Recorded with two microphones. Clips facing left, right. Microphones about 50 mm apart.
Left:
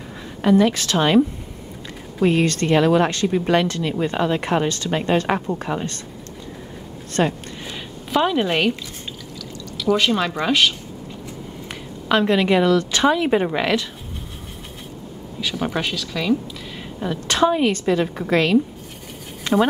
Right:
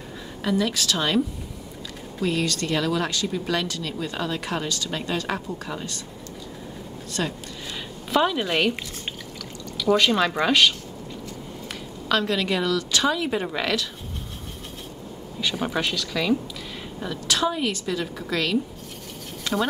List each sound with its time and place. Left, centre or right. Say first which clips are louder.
0.4 s a woman's voice: left 8 dB; left
2.2 s speech: left 7 dB; left
7.2 s speech: left 8 dB; left
8.1 s speech: left 3 dB; centre
9.8 s speech: left 1 dB; centre
12.1 s a woman's voice: left 6 dB; left
15.6 s speech: left 3 dB; centre
17.3 s a woman's voice: left 7 dB; left
19.5 s a sound: left 7 dB; left